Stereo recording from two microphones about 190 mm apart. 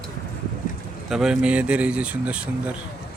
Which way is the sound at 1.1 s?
Centre (ahead or behind).